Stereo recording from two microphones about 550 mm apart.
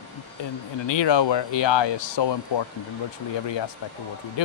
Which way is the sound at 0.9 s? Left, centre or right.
Left.